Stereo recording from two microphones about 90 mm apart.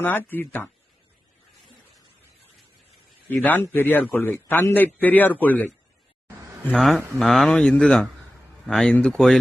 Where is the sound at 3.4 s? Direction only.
20° left (ahead or behind).